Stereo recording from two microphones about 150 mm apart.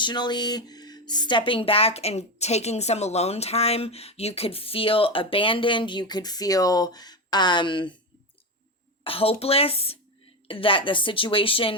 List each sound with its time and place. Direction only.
0.0 s speech: 30° left (ahead or behind)
9.0 s speech: 40° left (ahead or behind)